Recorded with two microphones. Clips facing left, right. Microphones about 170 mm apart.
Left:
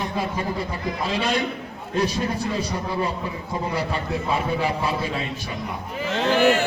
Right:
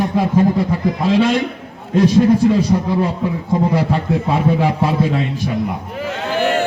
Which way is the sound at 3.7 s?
90° right.